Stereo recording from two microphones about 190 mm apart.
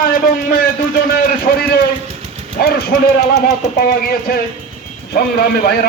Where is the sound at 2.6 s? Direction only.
55° left (ahead or behind).